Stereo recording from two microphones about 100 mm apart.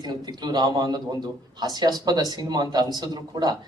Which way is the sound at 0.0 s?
45° right (ahead or behind).